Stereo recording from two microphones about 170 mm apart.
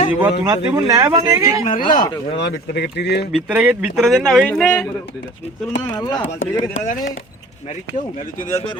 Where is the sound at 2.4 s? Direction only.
80° left.